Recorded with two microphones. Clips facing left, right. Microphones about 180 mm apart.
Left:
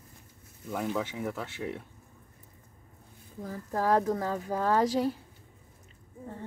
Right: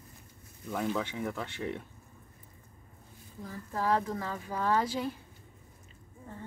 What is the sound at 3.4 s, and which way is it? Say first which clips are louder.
Speech: left 4 dB; 40° left (ahead or behind).